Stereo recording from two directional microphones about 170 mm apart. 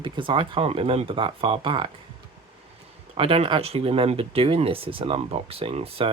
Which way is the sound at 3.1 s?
35° right (ahead or behind).